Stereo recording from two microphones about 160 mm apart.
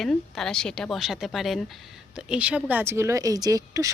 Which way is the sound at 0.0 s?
Centre (ahead or behind).